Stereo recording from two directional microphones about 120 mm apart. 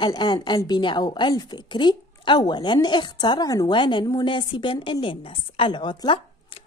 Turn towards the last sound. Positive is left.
turn(degrees=40)  # may be behind; listen again after turning